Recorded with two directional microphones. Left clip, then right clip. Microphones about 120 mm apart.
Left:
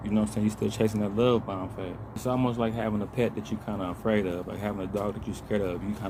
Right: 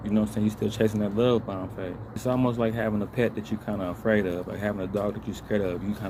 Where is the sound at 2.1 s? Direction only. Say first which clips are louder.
Right 2 dB; 10° left (ahead or behind).